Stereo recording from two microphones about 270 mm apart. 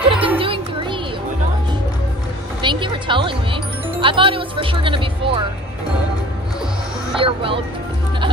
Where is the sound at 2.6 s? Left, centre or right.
Centre.